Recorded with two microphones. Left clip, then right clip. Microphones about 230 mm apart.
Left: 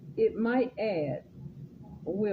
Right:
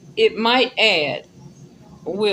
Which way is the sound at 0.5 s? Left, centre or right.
Right.